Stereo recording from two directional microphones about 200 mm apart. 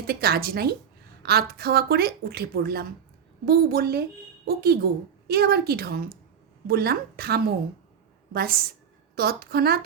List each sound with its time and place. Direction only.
0.1 s a woman's voice: 50° right (ahead or behind)